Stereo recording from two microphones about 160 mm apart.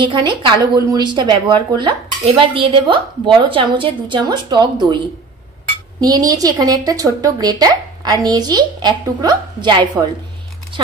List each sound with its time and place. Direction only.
0.0 s speech: 30° right (ahead or behind)